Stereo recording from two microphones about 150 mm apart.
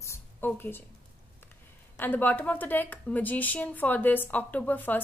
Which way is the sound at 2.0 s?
15° left (ahead or behind).